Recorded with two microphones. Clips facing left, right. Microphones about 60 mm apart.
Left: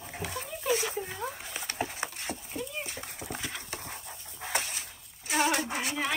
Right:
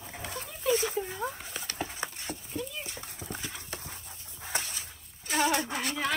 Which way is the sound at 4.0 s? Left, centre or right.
Centre.